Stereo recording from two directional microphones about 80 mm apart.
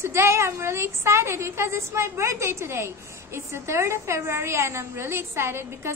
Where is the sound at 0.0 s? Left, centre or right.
Right.